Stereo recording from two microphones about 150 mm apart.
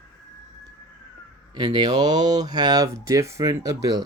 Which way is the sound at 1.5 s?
25° right (ahead or behind).